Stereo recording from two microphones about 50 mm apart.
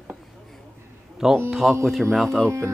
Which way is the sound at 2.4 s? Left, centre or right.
Right.